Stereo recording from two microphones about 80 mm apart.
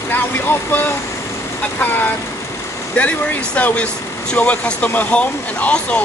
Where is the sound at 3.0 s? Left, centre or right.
Centre.